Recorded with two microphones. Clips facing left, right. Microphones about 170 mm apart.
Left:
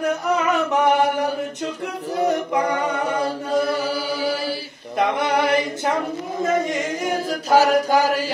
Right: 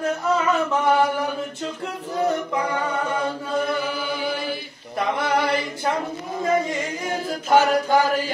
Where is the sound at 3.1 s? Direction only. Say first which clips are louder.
Left 3 dB; 40° left (ahead or behind).